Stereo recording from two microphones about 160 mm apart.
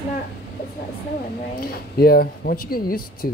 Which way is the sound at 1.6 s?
70° left (ahead or behind).